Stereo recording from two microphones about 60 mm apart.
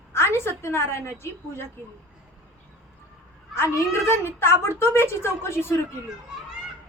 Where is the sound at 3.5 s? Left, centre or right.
Left.